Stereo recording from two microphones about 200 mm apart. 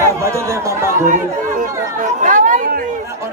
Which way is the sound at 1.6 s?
40° right (ahead or behind).